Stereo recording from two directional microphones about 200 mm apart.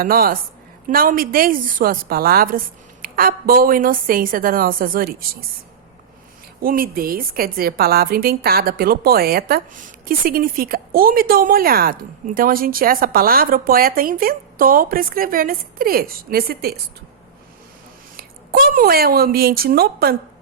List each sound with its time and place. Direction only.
0.0 s a woman's voice: 45° right (ahead or behind)
6.6 s a woman's voice: 45° right (ahead or behind)
18.2 s a woman's voice: 45° right (ahead or behind)